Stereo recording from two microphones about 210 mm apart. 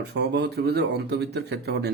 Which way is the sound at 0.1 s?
50° right (ahead or behind).